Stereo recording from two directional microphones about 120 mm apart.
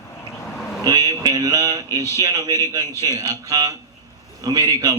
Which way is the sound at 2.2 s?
30° right (ahead or behind).